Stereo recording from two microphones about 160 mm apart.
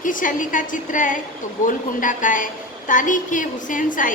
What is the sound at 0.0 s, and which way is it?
A woman's voice, 55° left (ahead or behind).